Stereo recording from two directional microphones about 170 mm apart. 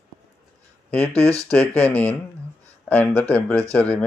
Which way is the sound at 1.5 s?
5° left (ahead or behind).